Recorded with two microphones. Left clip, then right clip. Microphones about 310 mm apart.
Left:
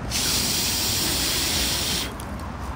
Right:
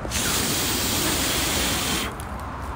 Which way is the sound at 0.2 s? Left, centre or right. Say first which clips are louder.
Left 1 dB; right.